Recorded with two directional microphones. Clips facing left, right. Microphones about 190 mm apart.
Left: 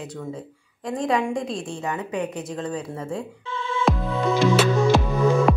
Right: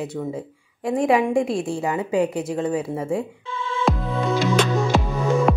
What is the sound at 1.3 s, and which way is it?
A woman's voice, 30° right (ahead or behind).